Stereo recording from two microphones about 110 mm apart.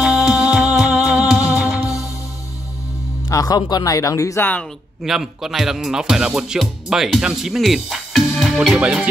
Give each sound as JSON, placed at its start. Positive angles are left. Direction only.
{"t": 0.0, "sound": "music", "side_deg": -5}
{"t": 1.8, "sound": "music", "side_deg": 30}
{"t": 3.3, "sound": "speech", "side_deg": 35}
{"t": 5.0, "sound": "music", "side_deg": -5}